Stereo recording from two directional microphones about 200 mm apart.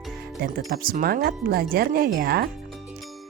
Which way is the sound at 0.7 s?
45° right (ahead or behind).